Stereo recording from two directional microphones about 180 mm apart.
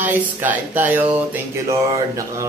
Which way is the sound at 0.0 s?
10° right (ahead or behind).